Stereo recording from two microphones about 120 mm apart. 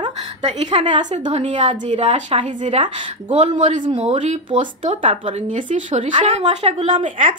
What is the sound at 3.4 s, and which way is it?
Speech, 75° right (ahead or behind).